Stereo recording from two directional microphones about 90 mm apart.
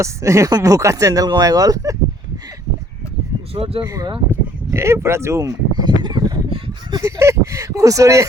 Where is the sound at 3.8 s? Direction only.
40° right (ahead or behind).